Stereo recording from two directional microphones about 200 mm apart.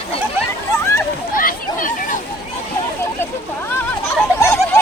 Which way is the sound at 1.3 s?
40° left (ahead or behind).